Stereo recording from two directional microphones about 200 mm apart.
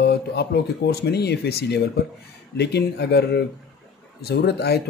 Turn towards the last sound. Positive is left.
turn(degrees=55)  # may be behind; listen again after turning